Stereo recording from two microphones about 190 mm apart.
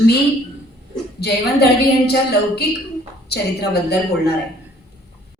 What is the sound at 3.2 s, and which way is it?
A woman's voice, 60° left (ahead or behind).